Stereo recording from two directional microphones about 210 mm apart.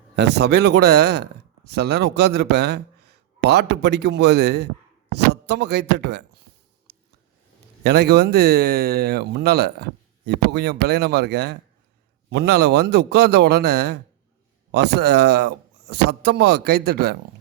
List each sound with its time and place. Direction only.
0.2 s speech: 55° right (ahead or behind)
6.9 s a sound: 50° right (ahead or behind)
7.9 s speech: 50° right (ahead or behind)